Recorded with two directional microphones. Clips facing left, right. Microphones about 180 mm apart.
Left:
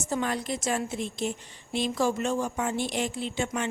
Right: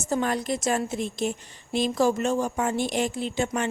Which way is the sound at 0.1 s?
45° right (ahead or behind).